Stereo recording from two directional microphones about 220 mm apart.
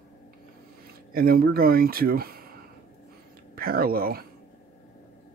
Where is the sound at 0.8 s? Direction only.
40° right (ahead or behind).